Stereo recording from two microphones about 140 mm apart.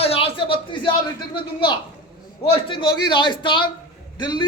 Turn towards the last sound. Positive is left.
turn(degrees=30)  # may be behind; listen again after turning